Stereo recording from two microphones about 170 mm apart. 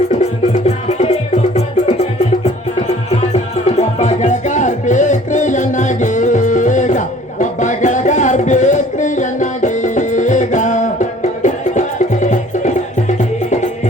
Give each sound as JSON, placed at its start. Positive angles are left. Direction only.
{"t": 0.9, "sound": "music", "side_deg": 40}